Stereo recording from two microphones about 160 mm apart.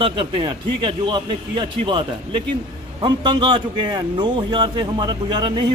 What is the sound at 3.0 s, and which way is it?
Speech, 30° right (ahead or behind).